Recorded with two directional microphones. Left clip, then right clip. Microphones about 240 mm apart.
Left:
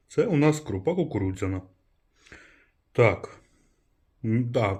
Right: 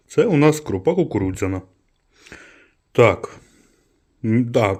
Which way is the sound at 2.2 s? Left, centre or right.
Right.